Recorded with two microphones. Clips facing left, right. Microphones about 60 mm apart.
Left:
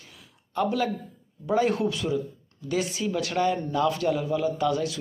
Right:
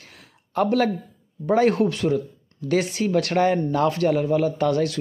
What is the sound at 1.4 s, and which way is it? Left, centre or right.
Speech, right.